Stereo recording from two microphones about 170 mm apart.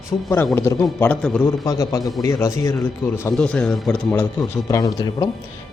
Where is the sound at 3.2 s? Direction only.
5° left (ahead or behind).